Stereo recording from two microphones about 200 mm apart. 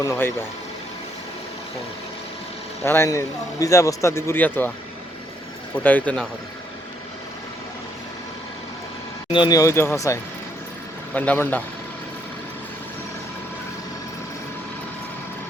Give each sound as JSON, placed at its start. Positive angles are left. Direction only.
{"t": 0.0, "sound": "a man's voice", "side_deg": 15}
{"t": 2.8, "sound": "a man's voice", "side_deg": 10}
{"t": 5.7, "sound": "a man's voice", "side_deg": 5}
{"t": 9.3, "sound": "a man's voice", "side_deg": 20}